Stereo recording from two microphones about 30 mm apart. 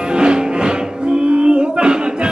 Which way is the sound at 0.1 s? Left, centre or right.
Right.